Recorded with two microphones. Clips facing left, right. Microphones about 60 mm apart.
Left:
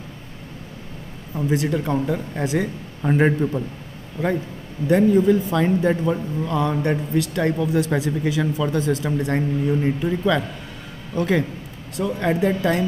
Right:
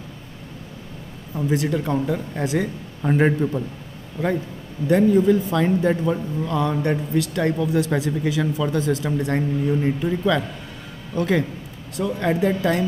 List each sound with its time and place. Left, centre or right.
1.3 s a man's voice: left
4.8 s a man's voice: centre